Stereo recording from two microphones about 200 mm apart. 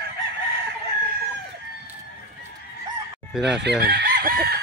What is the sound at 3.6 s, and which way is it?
Chicken, 55° right (ahead or behind).